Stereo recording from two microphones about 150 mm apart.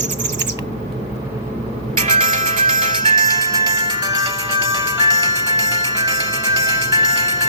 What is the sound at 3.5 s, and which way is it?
Music, 25° right (ahead or behind).